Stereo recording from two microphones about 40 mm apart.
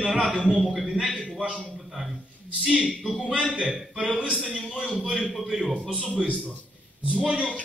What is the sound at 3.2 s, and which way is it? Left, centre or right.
Speech, right.